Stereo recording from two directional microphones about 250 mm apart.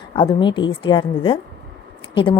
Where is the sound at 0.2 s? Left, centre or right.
Centre.